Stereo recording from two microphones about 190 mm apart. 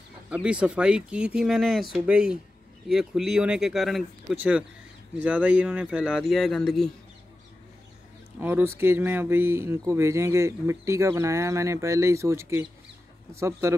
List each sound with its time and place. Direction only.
0.3 s speech: 5° right (ahead or behind)
8.4 s speech: 10° right (ahead or behind)